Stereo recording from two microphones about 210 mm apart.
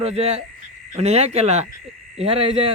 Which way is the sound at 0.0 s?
30° right (ahead or behind).